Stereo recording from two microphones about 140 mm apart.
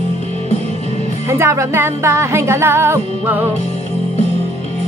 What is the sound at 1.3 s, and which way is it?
Music, 20° right (ahead or behind).